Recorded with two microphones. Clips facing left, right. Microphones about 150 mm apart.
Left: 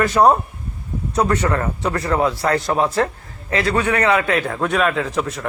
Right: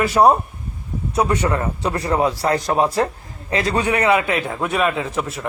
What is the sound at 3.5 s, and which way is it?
A man's voice, 20° right (ahead or behind).